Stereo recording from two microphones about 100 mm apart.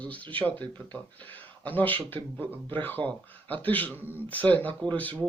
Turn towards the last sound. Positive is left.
turn(degrees=15)  # may be behind; listen again after turning